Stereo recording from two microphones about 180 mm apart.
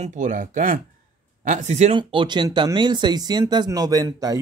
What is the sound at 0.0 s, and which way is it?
Speech, 45° right (ahead or behind).